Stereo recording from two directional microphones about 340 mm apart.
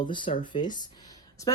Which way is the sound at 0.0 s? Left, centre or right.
Centre.